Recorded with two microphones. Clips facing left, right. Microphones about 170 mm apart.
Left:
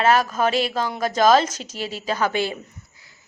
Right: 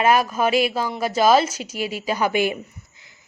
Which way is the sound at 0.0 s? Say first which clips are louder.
Even; 10° right (ahead or behind).